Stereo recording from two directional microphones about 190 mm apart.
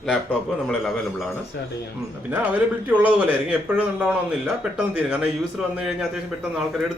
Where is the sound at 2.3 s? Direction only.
10° right (ahead or behind).